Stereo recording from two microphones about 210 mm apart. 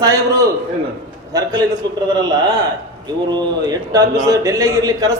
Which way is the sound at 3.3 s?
20° right (ahead or behind).